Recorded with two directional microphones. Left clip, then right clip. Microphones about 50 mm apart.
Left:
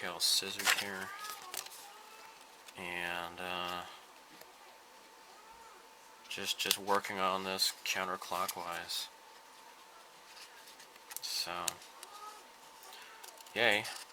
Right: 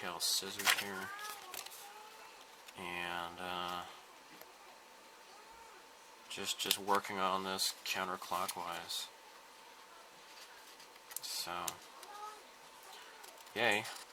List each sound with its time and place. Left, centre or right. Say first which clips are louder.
0.0 s speech: left 4 dB; left
2.7 s speech: left 2 dB; left
6.2 s speech: left 3 dB; left
11.1 s computer keyboard: left 3 dB; left
13.5 s speech: left 3 dB; left